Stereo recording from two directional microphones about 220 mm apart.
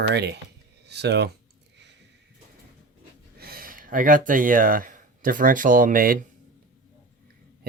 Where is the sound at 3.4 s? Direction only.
45° right (ahead or behind).